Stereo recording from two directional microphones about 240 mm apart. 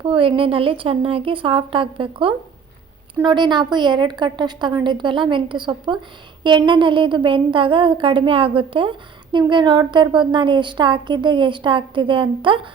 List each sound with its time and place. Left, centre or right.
0.0 s speech: right